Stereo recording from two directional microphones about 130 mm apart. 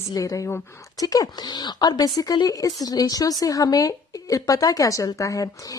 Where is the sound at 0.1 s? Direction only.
25° left (ahead or behind).